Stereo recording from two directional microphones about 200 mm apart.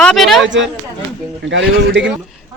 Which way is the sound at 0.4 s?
65° right (ahead or behind).